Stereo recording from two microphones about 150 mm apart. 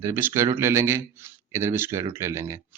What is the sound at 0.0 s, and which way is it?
Speech, 15° right (ahead or behind).